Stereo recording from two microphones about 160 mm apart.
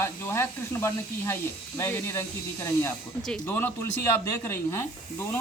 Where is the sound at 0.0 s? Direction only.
15° left (ahead or behind).